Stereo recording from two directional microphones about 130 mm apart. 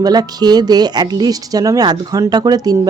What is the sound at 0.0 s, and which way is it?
Speech, 30° right (ahead or behind).